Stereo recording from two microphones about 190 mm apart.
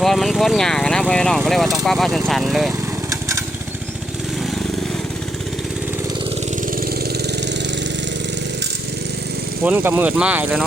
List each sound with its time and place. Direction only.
0.0 s speech: centre (ahead or behind)
3.1 s lawn mower: 15° right (ahead or behind)
7.4 s engine: 65° right (ahead or behind)
9.6 s speech: 10° right (ahead or behind)